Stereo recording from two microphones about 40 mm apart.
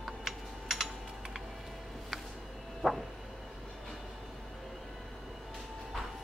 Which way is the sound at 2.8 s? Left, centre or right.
Centre.